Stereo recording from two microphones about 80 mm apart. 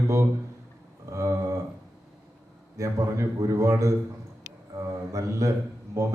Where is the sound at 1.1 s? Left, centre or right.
Right.